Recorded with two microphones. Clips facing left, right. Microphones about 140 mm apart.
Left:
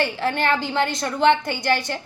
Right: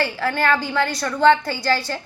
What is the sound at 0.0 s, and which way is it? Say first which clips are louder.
A woman's voice: right 1 dB; 20° left (ahead or behind).